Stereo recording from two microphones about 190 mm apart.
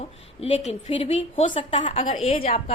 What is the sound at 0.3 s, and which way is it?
A woman's voice, 30° left (ahead or behind).